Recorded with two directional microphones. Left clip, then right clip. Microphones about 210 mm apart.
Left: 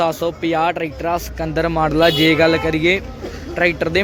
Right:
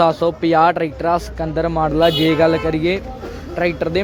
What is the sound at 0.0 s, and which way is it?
Speech, 20° right (ahead or behind).